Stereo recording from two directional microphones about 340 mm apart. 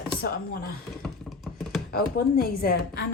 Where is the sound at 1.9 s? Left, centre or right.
Left.